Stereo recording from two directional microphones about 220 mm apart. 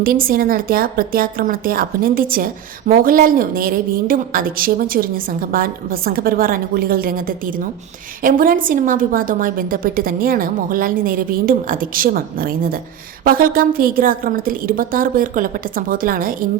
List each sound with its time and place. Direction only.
0.0 s a woman's voice: 40° right (ahead or behind)